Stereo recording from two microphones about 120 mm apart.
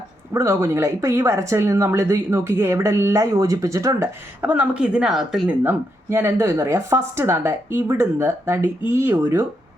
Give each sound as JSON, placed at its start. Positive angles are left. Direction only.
{"t": 0.3, "sound": "a woman's voice", "side_deg": -25}
{"t": 4.4, "sound": "a woman's voice", "side_deg": -10}
{"t": 5.6, "sound": "a woman's voice", "side_deg": -20}